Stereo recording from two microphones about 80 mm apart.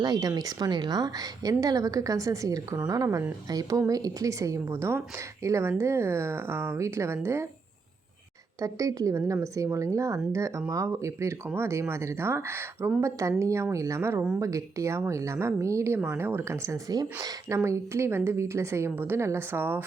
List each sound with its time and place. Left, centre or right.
0.0 s a woman's voice: right
8.6 s a woman's voice: right
16.9 s speech: right
17.5 s a woman's voice: right